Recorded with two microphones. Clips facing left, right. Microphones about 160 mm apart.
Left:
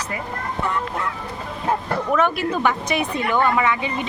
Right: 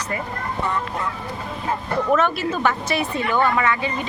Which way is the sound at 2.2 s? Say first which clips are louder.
Left 1 dB; 15° left (ahead or behind).